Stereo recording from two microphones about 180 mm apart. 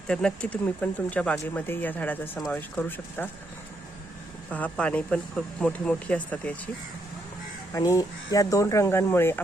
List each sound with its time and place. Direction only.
0.1 s speech: 5° left (ahead or behind)
4.5 s speech: 10° left (ahead or behind)
7.7 s speech: 20° left (ahead or behind)